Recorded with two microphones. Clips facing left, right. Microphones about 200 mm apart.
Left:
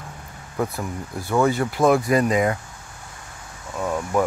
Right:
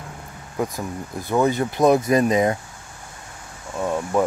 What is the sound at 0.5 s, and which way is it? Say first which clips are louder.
Speech: even; 15° right (ahead or behind).